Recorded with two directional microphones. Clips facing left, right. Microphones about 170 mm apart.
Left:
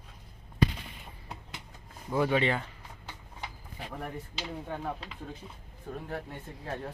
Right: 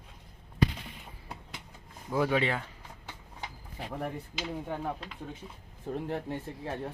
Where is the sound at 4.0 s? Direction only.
10° right (ahead or behind).